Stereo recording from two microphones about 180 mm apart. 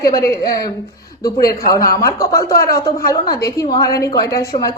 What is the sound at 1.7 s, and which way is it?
Speech, 20° left (ahead or behind).